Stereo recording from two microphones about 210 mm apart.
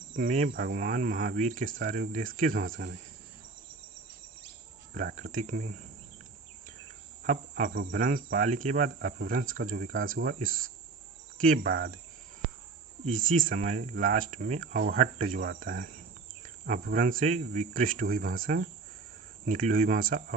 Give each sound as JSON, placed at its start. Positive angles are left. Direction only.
{"t": 0.2, "sound": "speech", "side_deg": -40}
{"t": 4.9, "sound": "speech", "side_deg": -35}
{"t": 7.3, "sound": "speech", "side_deg": -40}
{"t": 13.1, "sound": "speech", "side_deg": -40}